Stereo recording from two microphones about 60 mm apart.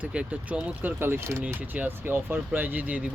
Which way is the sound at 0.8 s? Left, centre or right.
Right.